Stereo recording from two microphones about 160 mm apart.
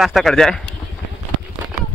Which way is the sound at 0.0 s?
Centre (ahead or behind).